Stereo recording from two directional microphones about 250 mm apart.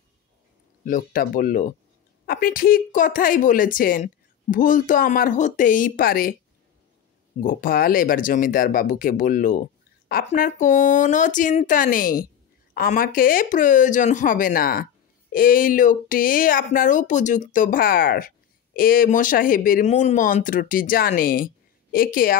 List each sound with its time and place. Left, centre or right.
0.8 s speech: left
7.3 s speech: left